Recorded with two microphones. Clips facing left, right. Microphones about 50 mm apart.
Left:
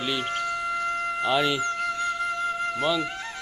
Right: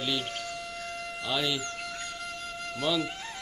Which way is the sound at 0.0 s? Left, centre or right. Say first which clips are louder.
Left 4 dB; centre.